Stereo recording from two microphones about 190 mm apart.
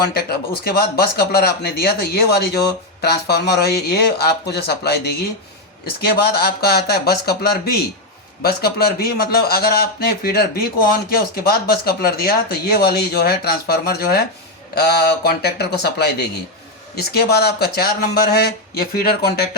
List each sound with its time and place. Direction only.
0.1 s a man's voice: 55° left (ahead or behind)